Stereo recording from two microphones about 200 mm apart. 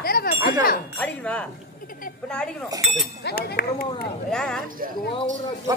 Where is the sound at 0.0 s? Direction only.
50° left (ahead or behind).